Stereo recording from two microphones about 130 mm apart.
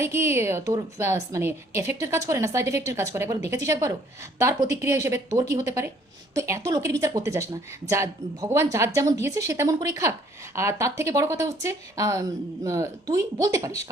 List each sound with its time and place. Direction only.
0.0 s speech: 20° right (ahead or behind)